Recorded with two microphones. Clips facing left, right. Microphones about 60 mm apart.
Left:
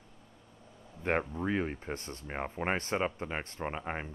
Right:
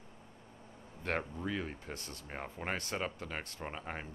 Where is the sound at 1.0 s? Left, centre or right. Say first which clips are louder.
Left 5 dB; left.